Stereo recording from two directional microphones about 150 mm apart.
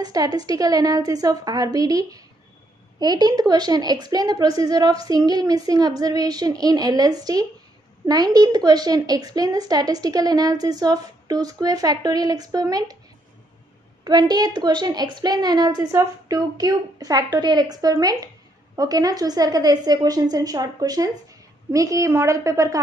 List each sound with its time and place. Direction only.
0.0 s a woman's voice: 25° right (ahead or behind)
14.0 s a woman's voice: 30° right (ahead or behind)